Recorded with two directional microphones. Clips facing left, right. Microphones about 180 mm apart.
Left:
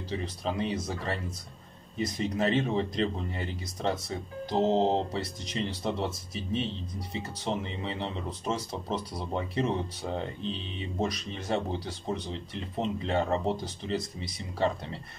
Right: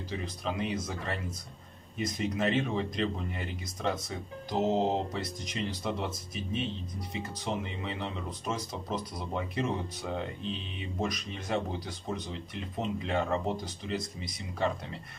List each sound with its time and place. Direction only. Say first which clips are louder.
0.2 s speech: left 1 dB; 30° left (ahead or behind)